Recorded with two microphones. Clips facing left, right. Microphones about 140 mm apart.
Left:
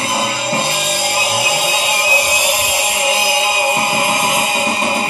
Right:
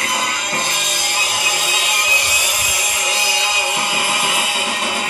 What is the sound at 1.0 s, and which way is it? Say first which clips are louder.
Music: left 6 dB; 35° left (ahead or behind).